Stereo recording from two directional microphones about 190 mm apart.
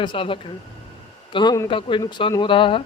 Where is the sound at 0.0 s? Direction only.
25° left (ahead or behind).